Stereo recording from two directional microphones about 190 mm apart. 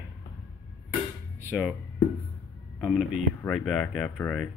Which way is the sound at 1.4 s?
5° right (ahead or behind).